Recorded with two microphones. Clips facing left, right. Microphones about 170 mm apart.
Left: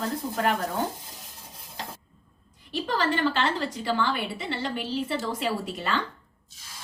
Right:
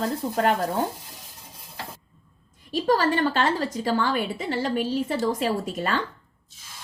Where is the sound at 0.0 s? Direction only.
35° right (ahead or behind).